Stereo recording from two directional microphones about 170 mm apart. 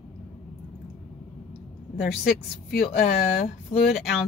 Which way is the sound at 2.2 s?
65° left (ahead or behind).